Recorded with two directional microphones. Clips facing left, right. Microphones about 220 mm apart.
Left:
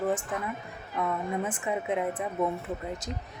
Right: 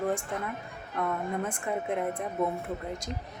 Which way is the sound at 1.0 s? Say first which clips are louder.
Left 1 dB; 5° left (ahead or behind).